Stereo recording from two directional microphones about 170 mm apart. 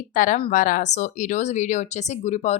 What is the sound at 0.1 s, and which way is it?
Speech, 50° left (ahead or behind).